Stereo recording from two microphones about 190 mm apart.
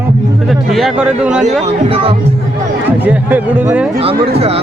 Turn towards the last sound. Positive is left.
turn(degrees=-30)  # may be behind; listen again after turning